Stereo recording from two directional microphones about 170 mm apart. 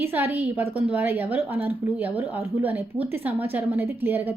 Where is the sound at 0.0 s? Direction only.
10° right (ahead or behind).